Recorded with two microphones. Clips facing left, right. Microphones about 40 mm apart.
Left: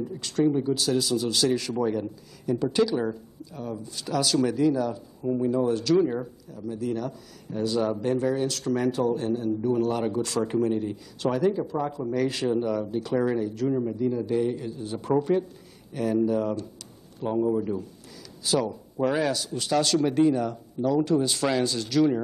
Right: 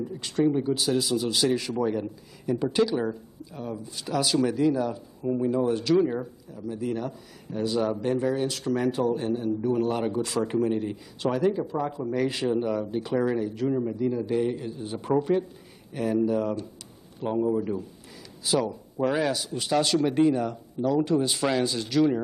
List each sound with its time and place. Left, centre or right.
0.2 s speech: centre
1.7 s a man's voice: centre
2.0 s a man's voice: centre
5.9 s speech: centre
6.5 s a man's voice: right
13.1 s a man's voice: centre
18.4 s speech: centre
18.9 s a man's voice: centre
19.3 s a man's voice: centre